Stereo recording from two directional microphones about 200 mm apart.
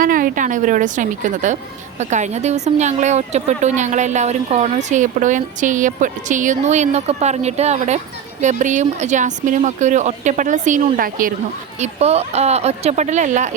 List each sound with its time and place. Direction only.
0.0 s a woman's voice: 45° right (ahead or behind)
11.8 s a woman's voice: 30° right (ahead or behind)